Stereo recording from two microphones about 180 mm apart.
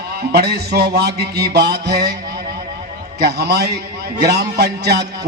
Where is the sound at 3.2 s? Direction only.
65° right (ahead or behind).